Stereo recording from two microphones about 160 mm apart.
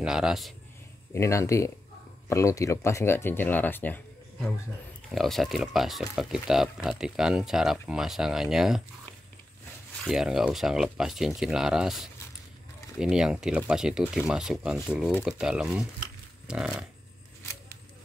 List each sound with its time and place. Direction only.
0.0 s speech: 5° right (ahead or behind)
1.1 s speech: 15° left (ahead or behind); by 8.8 s 5° right (ahead or behind)
10.0 s speech: 5° right (ahead or behind)